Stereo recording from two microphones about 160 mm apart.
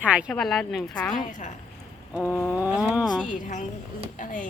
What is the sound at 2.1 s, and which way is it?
Speech, centre (ahead or behind).